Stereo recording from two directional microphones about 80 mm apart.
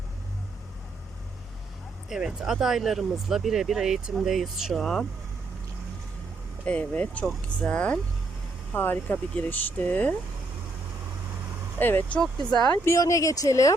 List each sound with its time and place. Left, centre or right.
2.0 s speech: centre
6.7 s speech: centre
11.8 s speech: left
12.8 s speech: left